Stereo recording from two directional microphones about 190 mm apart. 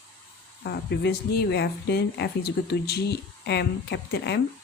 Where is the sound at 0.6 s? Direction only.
60° left (ahead or behind).